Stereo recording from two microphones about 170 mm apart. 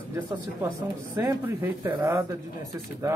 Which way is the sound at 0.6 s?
10° right (ahead or behind).